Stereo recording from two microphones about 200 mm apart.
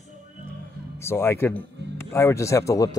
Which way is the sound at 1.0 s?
10° left (ahead or behind).